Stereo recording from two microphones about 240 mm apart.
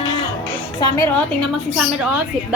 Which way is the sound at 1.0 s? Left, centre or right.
Centre.